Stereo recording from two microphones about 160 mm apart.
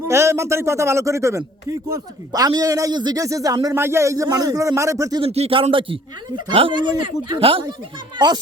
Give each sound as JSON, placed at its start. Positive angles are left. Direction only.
{"t": 0.1, "sound": "a man's voice", "side_deg": -15}
{"t": 5.2, "sound": "speech", "side_deg": -35}